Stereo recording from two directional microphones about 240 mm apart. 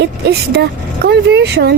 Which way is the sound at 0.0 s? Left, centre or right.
Right.